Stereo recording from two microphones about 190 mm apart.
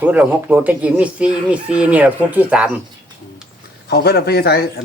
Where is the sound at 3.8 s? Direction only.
60° left (ahead or behind).